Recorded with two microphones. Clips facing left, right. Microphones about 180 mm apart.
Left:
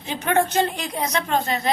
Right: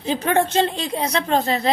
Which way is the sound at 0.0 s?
30° right (ahead or behind).